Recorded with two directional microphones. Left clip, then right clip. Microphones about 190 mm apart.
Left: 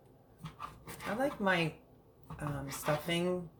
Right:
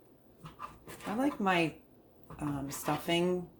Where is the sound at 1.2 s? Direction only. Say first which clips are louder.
Right 2 dB; 35° right (ahead or behind).